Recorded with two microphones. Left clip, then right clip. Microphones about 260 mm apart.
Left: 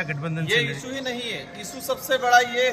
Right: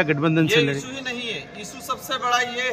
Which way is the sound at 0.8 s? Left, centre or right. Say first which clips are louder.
Even; centre.